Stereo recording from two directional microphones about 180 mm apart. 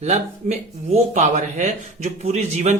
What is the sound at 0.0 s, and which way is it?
Speech, 40° right (ahead or behind).